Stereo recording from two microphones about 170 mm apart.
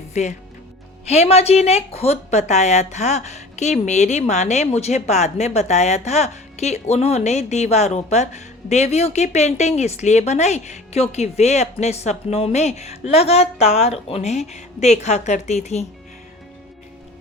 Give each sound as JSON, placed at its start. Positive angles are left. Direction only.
{"t": 0.1, "sound": "a woman's voice", "side_deg": 45}